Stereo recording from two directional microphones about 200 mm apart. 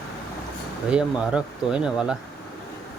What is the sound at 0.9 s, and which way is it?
Speech, 5° right (ahead or behind).